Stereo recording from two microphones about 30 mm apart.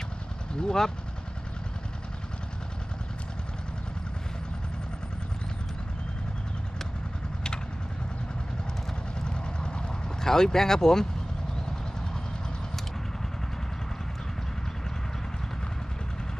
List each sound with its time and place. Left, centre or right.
0.6 s speech: left
9.2 s vehicle: left
10.2 s speech: centre